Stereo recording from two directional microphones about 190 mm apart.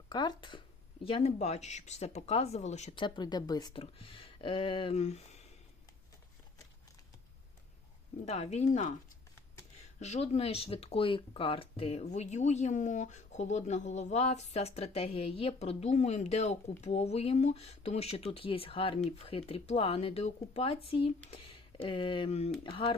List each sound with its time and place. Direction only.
0.1 s speech: 20° left (ahead or behind)
2.9 s speech: 25° left (ahead or behind)
8.2 s speech: 35° left (ahead or behind)
10.0 s speech: 35° left (ahead or behind)